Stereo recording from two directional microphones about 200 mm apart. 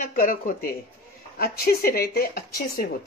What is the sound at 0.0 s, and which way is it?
A woman's voice, 45° left (ahead or behind).